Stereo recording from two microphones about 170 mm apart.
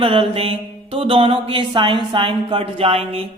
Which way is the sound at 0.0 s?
30° right (ahead or behind).